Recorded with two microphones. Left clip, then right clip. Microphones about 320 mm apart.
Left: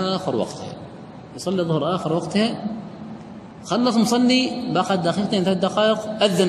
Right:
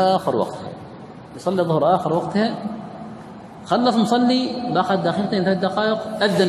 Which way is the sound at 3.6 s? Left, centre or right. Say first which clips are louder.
Right 2 dB; centre.